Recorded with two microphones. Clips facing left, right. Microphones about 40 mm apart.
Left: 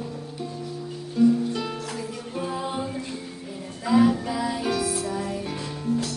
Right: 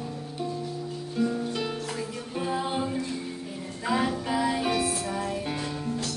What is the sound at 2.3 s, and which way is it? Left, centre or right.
Music, right.